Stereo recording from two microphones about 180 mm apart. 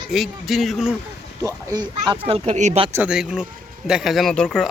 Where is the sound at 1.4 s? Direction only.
25° right (ahead or behind).